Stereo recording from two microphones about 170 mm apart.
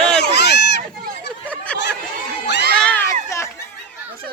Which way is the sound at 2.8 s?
10° left (ahead or behind).